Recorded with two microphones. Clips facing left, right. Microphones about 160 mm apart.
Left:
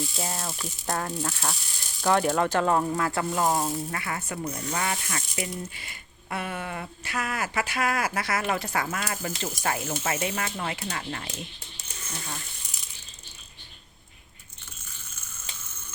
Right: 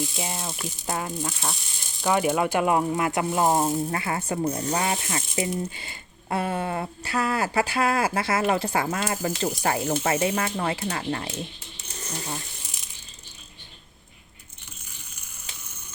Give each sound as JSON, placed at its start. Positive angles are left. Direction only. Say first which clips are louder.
{"t": 0.2, "sound": "speech", "louder": "right 1 dB", "side_deg": -15}
{"t": 4.8, "sound": "speech", "louder": "right 4 dB", "side_deg": -25}